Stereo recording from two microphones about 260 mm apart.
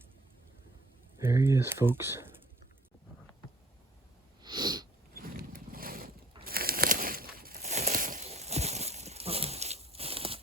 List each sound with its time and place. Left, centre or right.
1.2 s speech: centre
4.4 s sniff: centre
5.1 s vehicle: right
6.4 s bird: right